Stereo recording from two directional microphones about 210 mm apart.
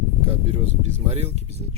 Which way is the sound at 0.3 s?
30° right (ahead or behind).